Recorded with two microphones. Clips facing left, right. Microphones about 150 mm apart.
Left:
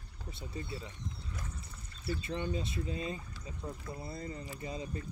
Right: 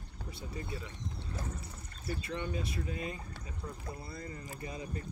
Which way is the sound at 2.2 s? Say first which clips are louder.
Left 1 dB; 30° left (ahead or behind).